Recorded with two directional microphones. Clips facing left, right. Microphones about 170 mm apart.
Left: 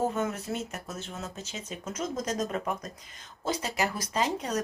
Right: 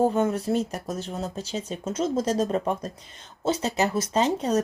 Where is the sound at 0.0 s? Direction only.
30° right (ahead or behind).